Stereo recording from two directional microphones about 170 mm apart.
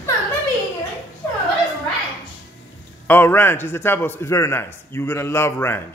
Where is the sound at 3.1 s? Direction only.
10° left (ahead or behind).